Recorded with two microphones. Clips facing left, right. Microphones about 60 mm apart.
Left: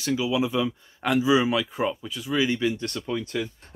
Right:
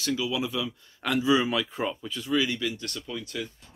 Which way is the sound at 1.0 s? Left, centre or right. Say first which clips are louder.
Left 3 dB; centre.